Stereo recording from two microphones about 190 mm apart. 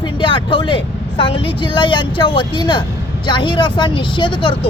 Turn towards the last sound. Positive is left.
turn(degrees=25)  # may be behind; listen again after turning